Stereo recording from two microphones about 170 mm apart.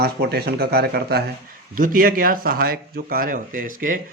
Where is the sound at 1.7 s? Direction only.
55° right (ahead or behind).